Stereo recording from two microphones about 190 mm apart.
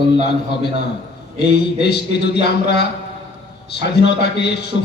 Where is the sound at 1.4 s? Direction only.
60° left (ahead or behind).